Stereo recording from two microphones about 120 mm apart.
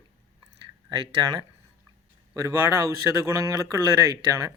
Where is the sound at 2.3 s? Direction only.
25° right (ahead or behind).